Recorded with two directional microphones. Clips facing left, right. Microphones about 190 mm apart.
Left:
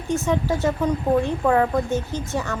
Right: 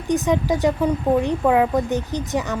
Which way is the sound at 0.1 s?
15° right (ahead or behind).